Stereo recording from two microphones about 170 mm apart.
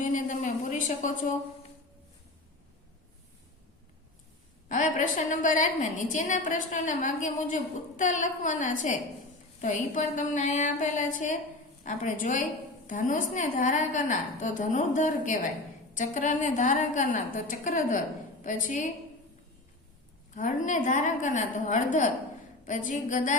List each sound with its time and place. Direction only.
0.0 s a sound: 45° left (ahead or behind)
4.7 s a woman's voice: 45° left (ahead or behind)
20.3 s a woman's voice: 50° left (ahead or behind)